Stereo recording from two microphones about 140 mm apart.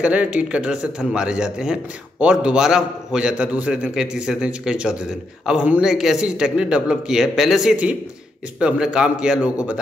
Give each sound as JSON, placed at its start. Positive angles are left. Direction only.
{"t": 0.0, "sound": "a man's voice", "side_deg": -10}